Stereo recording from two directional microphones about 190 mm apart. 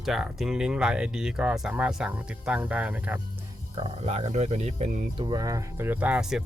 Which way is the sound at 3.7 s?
35° right (ahead or behind).